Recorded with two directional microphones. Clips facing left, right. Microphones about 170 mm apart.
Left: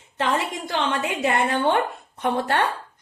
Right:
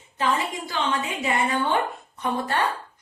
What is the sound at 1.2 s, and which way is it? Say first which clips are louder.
A woman's voice: left 4 dB; 60° left (ahead or behind).